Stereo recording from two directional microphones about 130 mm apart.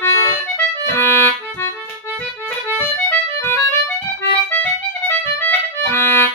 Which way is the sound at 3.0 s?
15° left (ahead or behind).